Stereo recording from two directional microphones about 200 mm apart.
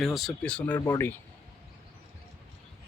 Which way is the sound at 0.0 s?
Centre (ahead or behind).